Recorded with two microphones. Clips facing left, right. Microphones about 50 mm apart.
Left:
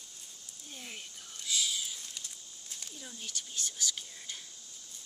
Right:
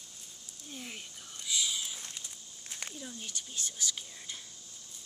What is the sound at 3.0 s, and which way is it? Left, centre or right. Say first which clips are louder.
Speech: right 1 dB; centre.